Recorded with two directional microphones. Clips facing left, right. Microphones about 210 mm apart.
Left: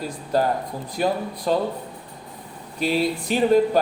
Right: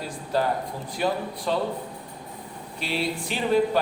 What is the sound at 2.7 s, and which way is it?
Speech, 45° left (ahead or behind).